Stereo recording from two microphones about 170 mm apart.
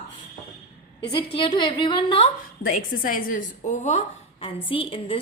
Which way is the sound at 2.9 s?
55° left (ahead or behind).